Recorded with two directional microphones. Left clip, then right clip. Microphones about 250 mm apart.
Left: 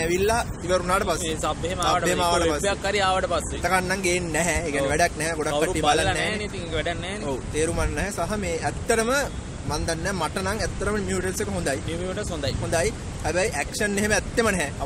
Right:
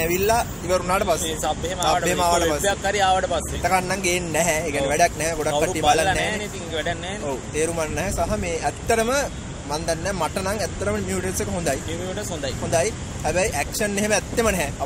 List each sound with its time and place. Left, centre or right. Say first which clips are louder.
0.0 s speech: right 2 dB; centre
1.2 s speech: right 2 dB; centre
2.0 s speech: right 2 dB; centre
2.6 s speech: right 3 dB; centre
3.6 s speech: right 2 dB; centre
6.2 s speech: right 1 dB; centre
7.5 s speech: right 2 dB; centre